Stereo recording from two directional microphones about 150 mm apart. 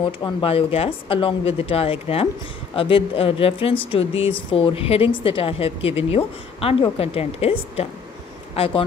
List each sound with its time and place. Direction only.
0.2 s a woman's voice: 35° left (ahead or behind)